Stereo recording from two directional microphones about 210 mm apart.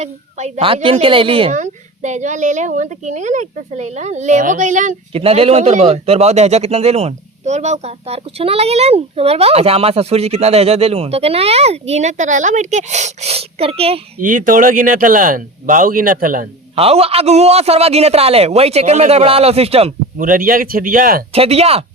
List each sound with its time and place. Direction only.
0.0 s speech: 35° right (ahead or behind)
16.7 s a man's voice: 30° right (ahead or behind)
20.2 s speech: 40° right (ahead or behind)
21.3 s a man's voice: 30° right (ahead or behind)